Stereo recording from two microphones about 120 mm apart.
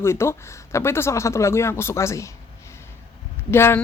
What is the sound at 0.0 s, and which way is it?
A woman's voice, 20° left (ahead or behind).